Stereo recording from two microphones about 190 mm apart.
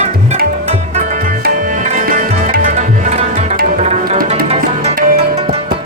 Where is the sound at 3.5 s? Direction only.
50° right (ahead or behind).